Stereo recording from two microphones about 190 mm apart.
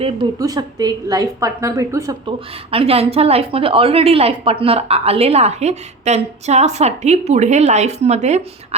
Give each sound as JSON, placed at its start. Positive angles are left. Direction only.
{"t": 0.3, "sound": "a woman's voice", "side_deg": -20}
{"t": 2.6, "sound": "a woman's voice", "side_deg": -30}